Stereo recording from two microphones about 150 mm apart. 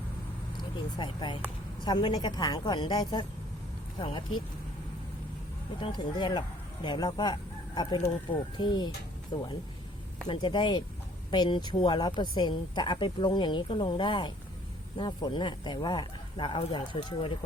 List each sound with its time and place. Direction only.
0.5 s a woman's voice: 30° left (ahead or behind)
5.8 s a woman's voice: 30° left (ahead or behind)